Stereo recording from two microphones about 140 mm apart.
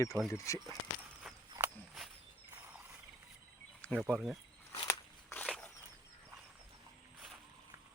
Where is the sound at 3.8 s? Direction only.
10° left (ahead or behind).